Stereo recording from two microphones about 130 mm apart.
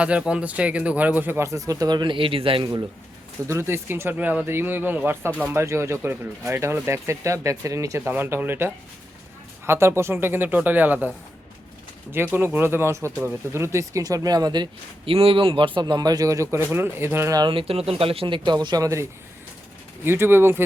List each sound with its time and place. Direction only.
0.0 s speech: 10° right (ahead or behind); by 2.6 s 45° right (ahead or behind)
3.4 s speech: 20° right (ahead or behind)
12.1 s speech: 15° right (ahead or behind)
17.3 s speech: 40° right (ahead or behind)
20.1 s speech: 15° right (ahead or behind)